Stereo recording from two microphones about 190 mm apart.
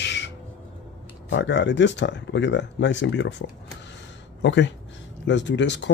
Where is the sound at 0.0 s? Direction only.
65° left (ahead or behind).